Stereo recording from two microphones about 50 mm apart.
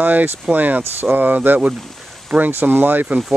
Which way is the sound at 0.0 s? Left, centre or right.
Right.